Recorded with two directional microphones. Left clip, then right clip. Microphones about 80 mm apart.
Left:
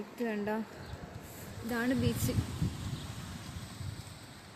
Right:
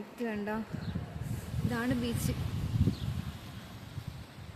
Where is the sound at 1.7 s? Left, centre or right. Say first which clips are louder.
Left 1 dB; centre.